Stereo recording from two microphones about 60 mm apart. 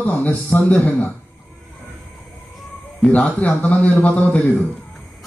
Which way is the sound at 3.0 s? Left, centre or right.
Left.